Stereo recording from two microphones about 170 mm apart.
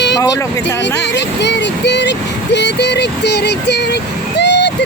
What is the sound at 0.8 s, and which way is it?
Speech, 90° left.